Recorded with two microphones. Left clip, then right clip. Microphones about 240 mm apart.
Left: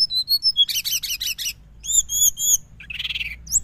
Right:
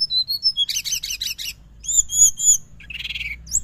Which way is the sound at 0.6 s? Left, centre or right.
Left.